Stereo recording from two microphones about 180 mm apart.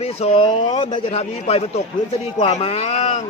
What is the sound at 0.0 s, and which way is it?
A man's voice, 35° left (ahead or behind).